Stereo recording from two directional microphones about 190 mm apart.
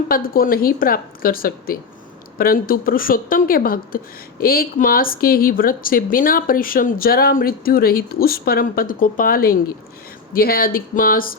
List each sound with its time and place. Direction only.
0.1 s speech: 50° left (ahead or behind)